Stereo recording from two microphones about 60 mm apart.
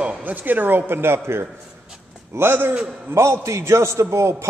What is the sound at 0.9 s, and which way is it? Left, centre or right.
A man's voice, right.